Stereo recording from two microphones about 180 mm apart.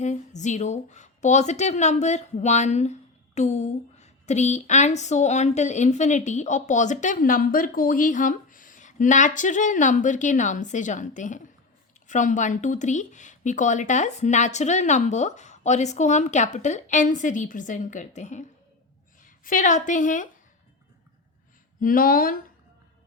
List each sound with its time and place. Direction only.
0.0 s a woman's voice: 40° left (ahead or behind)
21.8 s speech: 50° left (ahead or behind)